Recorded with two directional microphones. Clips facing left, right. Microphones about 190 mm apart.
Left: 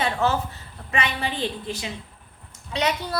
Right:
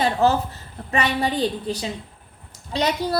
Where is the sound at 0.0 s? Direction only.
35° right (ahead or behind).